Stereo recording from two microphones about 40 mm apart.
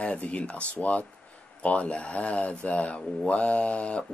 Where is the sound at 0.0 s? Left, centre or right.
Left.